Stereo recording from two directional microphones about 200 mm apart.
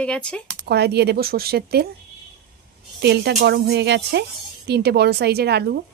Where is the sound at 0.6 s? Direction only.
55° right (ahead or behind).